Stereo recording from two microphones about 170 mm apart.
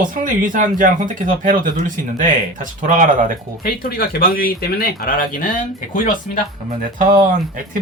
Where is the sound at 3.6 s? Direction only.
60° left (ahead or behind).